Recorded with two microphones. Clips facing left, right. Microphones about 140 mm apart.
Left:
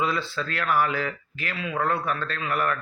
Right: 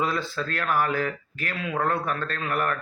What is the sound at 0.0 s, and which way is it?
A man's voice, 45° right (ahead or behind).